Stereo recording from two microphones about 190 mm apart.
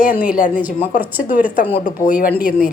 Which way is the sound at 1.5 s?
45° left (ahead or behind).